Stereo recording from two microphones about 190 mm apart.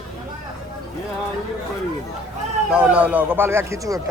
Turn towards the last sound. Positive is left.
turn(degrees=-15)  # may be behind; listen again after turning